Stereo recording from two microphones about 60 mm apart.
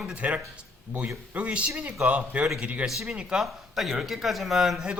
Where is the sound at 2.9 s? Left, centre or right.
Centre.